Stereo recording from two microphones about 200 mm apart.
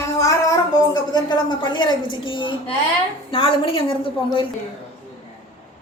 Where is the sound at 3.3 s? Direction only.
25° left (ahead or behind).